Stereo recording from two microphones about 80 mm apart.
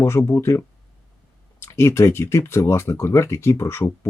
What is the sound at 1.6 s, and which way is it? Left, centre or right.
Speech, left.